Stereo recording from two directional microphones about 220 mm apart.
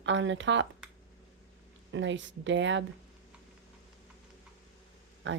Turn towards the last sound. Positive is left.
turn(degrees=-55)  # may be behind; listen again after turning